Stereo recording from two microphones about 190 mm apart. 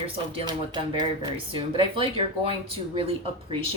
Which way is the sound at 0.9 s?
25° right (ahead or behind).